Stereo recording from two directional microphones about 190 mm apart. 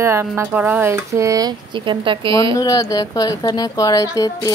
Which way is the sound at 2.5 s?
20° left (ahead or behind).